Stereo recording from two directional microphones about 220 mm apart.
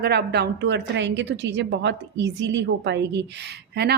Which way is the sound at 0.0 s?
45° right (ahead or behind).